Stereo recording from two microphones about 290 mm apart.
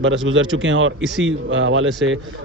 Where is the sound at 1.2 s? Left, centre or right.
Right.